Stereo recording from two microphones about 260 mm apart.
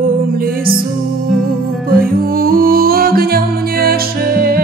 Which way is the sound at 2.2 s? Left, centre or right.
Right.